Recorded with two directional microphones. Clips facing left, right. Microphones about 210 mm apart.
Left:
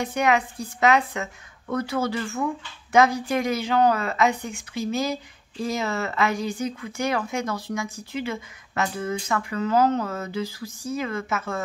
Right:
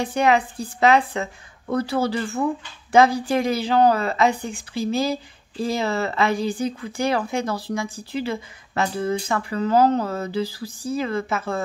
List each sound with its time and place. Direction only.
0.0 s speech: 30° right (ahead or behind)